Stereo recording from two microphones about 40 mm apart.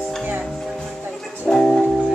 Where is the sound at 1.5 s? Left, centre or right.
Centre.